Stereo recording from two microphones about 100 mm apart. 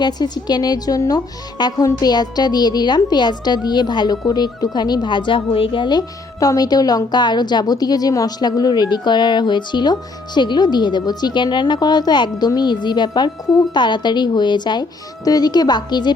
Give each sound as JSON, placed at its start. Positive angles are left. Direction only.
{"t": 0.0, "sound": "a woman's voice", "side_deg": 45}